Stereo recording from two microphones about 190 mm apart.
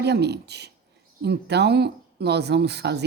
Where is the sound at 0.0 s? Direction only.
60° right (ahead or behind).